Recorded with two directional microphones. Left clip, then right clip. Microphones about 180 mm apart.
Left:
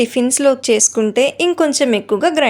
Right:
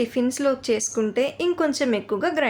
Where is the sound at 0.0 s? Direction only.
30° left (ahead or behind).